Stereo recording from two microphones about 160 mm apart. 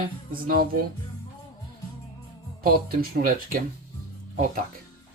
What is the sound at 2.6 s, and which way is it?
Speech, 70° right (ahead or behind).